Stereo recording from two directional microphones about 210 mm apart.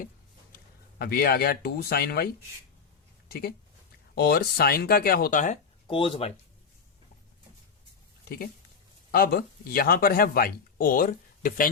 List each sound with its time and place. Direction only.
0.9 s speech: 45° left (ahead or behind)
5.9 s speech: 25° left (ahead or behind)
8.2 s speech: 45° left (ahead or behind)